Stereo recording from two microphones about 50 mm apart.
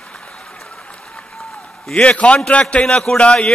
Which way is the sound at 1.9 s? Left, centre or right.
Left.